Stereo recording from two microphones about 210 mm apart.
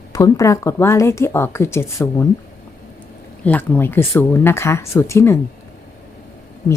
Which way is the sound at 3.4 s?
10° left (ahead or behind).